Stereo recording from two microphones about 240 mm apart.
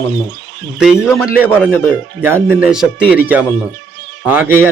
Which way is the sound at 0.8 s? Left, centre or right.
Centre.